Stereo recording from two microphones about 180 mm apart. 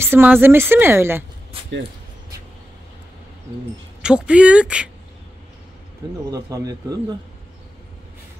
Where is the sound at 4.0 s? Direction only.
5° right (ahead or behind).